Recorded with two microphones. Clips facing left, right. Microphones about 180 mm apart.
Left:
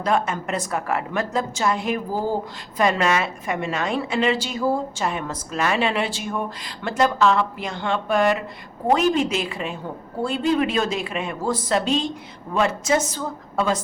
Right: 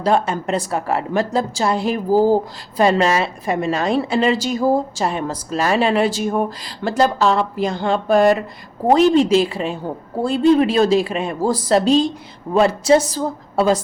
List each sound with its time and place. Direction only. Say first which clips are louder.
0.0 s a woman's voice: right 4 dB; 30° right (ahead or behind)